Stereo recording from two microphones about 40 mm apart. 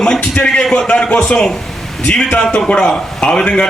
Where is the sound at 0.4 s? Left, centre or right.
Centre.